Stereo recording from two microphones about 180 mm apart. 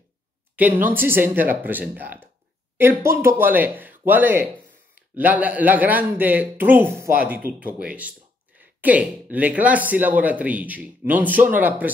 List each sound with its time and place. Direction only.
0.6 s speech: 10° right (ahead or behind)